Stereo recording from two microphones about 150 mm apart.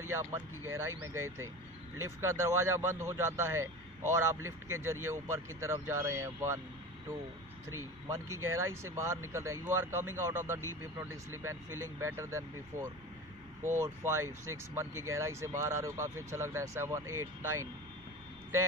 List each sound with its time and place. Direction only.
0.1 s speech: 20° right (ahead or behind)
8.1 s speech: 20° right (ahead or behind)